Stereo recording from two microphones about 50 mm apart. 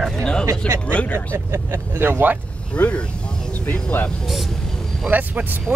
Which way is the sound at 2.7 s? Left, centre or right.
Left.